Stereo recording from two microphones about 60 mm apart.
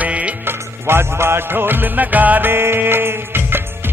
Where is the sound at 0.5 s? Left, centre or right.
Right.